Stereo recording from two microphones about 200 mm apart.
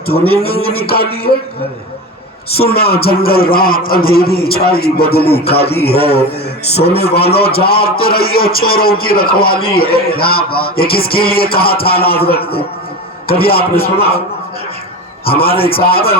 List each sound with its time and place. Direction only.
0.4 s a man's voice: 50° left (ahead or behind)
2.6 s a man's voice: 50° left (ahead or behind)
15.3 s a man's voice: 30° left (ahead or behind)
15.9 s a man's voice: 50° left (ahead or behind)